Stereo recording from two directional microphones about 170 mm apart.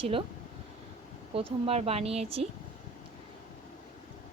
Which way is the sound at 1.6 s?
35° right (ahead or behind).